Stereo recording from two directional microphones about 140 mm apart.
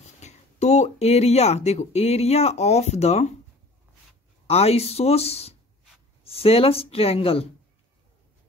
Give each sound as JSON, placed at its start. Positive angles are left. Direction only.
{"t": 0.2, "sound": "speech", "side_deg": 55}
{"t": 4.5, "sound": "speech", "side_deg": 50}